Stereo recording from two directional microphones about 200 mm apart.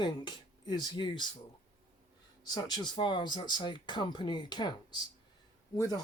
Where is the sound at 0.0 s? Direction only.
20° left (ahead or behind).